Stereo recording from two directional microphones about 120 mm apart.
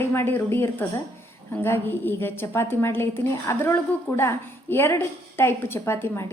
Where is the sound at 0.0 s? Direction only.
20° left (ahead or behind).